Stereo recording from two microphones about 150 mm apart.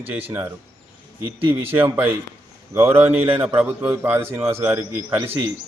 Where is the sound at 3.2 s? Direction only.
40° right (ahead or behind).